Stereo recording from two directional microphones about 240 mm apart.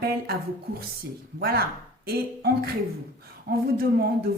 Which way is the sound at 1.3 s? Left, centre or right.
Right.